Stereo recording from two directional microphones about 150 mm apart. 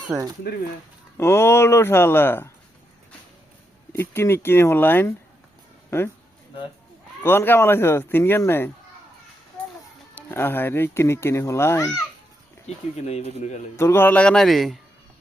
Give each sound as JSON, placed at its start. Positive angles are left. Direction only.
{"t": 0.1, "sound": "speech", "side_deg": 0}
{"t": 1.1, "sound": "speech", "side_deg": 15}
{"t": 3.9, "sound": "speech", "side_deg": 15}
{"t": 7.2, "sound": "speech", "side_deg": 15}
{"t": 10.2, "sound": "speech", "side_deg": 15}
{"t": 12.6, "sound": "speech", "side_deg": 45}
{"t": 13.7, "sound": "speech", "side_deg": 15}